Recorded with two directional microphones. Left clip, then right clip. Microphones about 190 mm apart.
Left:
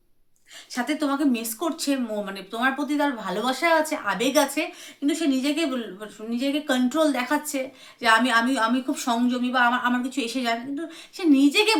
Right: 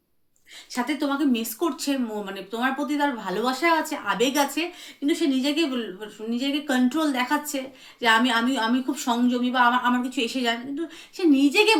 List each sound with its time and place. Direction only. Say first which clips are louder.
0.7 s speech: even; 15° left (ahead or behind)